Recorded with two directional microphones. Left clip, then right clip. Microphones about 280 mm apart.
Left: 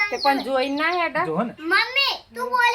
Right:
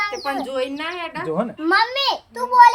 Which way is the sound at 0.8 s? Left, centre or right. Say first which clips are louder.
Left 6 dB; centre.